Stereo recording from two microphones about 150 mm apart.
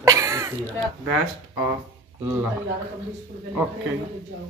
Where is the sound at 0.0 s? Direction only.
20° right (ahead or behind).